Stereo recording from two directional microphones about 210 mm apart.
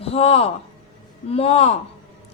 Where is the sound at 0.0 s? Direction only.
30° left (ahead or behind).